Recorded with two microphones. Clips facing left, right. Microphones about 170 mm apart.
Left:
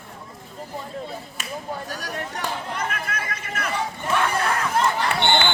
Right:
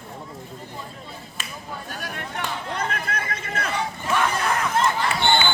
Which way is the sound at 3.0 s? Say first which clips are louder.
Right 1 dB; 30° right (ahead or behind).